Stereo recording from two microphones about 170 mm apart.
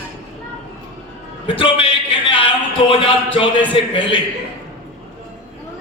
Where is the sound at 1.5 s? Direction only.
30° left (ahead or behind).